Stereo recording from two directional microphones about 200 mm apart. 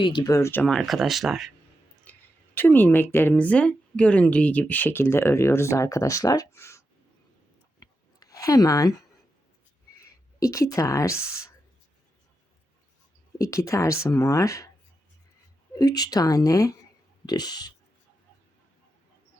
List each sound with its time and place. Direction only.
0.0 s speech: 25° left (ahead or behind); by 1.5 s centre (ahead or behind)
2.1 s a sound: 10° left (ahead or behind)
2.6 s speech: 10° left (ahead or behind)
7.8 s clicking: 20° left (ahead or behind)
10.0 s speech: 15° left (ahead or behind)
13.4 s speech: 15° left (ahead or behind)
15.7 s speech: 20° left (ahead or behind)